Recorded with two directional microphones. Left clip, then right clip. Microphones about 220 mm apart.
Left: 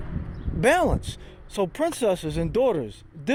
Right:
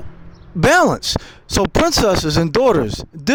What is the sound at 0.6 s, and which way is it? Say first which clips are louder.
Speech: right 8 dB; 40° right (ahead or behind).